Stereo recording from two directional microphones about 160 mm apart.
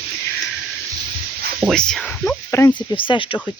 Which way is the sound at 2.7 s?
30° left (ahead or behind).